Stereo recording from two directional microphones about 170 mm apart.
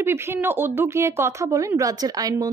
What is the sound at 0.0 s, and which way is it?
Speech, 15° right (ahead or behind).